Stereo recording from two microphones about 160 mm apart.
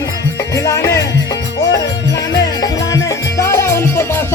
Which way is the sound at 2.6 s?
20° left (ahead or behind).